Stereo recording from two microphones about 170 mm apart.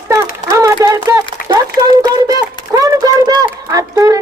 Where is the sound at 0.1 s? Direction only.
20° right (ahead or behind).